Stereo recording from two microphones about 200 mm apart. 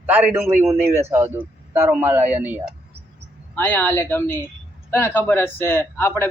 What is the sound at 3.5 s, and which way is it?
Speech, 10° left (ahead or behind).